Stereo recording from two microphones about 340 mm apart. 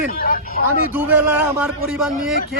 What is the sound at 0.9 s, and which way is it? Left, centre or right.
Speech, centre.